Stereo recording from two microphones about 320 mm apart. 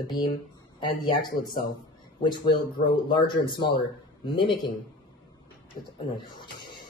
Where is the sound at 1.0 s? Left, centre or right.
Centre.